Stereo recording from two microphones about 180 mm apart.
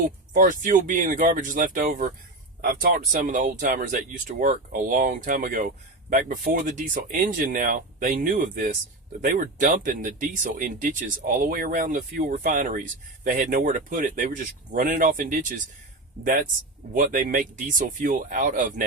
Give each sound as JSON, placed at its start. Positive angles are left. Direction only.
{"t": 0.3, "sound": "speech", "side_deg": -45}